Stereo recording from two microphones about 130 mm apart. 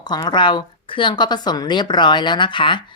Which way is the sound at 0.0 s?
35° left (ahead or behind).